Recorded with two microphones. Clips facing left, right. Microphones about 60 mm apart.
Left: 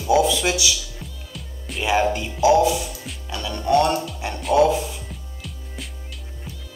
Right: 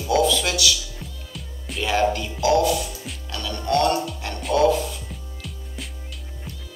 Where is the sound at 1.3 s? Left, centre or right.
Centre.